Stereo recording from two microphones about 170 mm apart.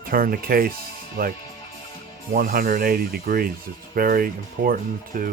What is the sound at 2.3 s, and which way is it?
Speech, 60° right (ahead or behind).